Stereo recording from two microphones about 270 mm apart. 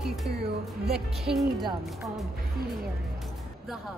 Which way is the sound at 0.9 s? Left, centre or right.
Centre.